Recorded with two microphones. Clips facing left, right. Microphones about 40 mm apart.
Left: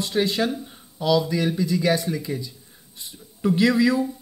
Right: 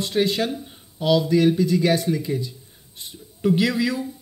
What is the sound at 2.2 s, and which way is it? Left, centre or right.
Speech, centre.